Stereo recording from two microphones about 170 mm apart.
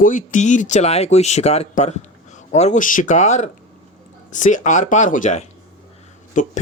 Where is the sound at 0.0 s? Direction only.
50° left (ahead or behind).